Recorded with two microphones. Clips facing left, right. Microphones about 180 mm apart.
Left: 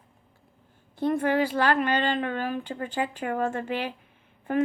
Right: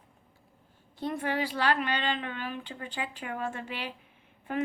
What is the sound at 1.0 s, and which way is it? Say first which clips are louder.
A woman's voice: left 7 dB; 50° left (ahead or behind).